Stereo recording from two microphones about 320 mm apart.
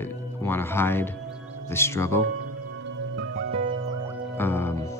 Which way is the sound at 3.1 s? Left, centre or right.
Right.